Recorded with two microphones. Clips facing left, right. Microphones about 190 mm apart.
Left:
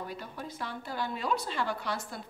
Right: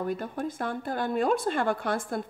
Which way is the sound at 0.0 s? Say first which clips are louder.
Right 9 dB; 50° right (ahead or behind).